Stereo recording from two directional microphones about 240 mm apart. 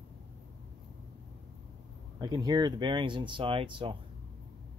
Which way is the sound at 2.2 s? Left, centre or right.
Centre.